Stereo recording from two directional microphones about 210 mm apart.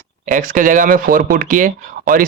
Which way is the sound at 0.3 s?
40° right (ahead or behind).